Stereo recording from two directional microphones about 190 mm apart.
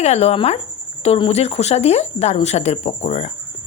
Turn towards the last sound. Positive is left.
turn(degrees=35)  # may be behind; listen again after turning